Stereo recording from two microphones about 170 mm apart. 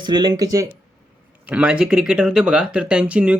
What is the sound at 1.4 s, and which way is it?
Speech, 5° right (ahead or behind).